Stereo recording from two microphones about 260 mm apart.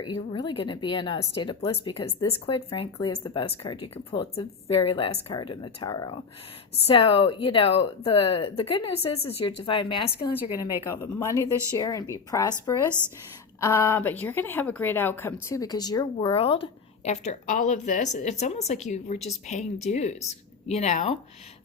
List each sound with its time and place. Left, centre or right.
0.0 s a woman's voice: centre